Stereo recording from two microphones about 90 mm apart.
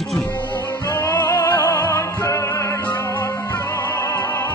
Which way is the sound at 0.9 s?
30° left (ahead or behind).